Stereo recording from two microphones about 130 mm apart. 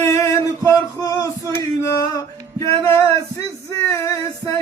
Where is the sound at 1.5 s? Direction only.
25° left (ahead or behind).